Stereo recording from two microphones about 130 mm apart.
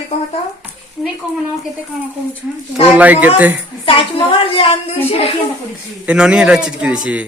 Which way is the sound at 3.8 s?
40° left (ahead or behind).